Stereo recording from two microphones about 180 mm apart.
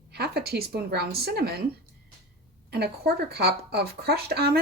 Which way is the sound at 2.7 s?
65° right (ahead or behind).